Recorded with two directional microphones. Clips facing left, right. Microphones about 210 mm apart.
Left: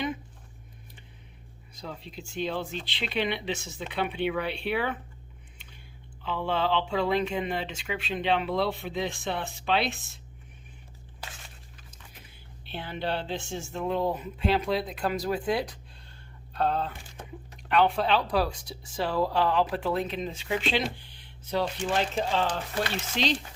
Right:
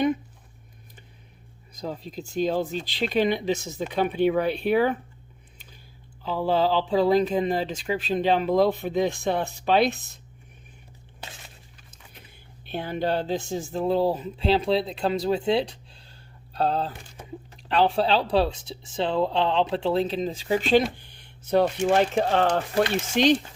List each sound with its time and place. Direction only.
1.7 s speech: 40° right (ahead or behind)
6.2 s speech: 35° right (ahead or behind)
12.6 s speech: 45° right (ahead or behind)
21.5 s speech: 50° right (ahead or behind)